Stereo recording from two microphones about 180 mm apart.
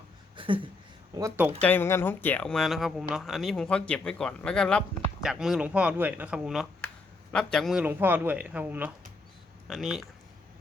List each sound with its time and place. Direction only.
0.3 s a sound: 30° right (ahead or behind)
1.1 s a man's voice: 15° right (ahead or behind)
1.6 s a man's voice: 10° left (ahead or behind)